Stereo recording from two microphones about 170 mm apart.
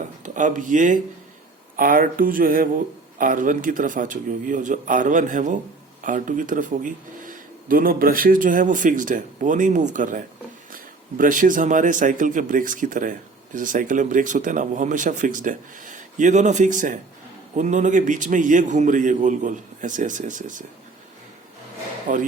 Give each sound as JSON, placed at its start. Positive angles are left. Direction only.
{"t": 0.2, "sound": "speech", "side_deg": -50}
{"t": 22.0, "sound": "speech", "side_deg": -50}